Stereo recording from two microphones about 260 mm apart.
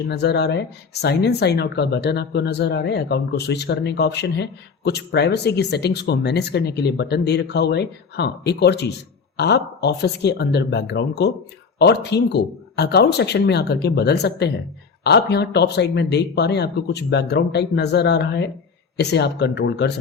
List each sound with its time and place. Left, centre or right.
0.1 s speech: left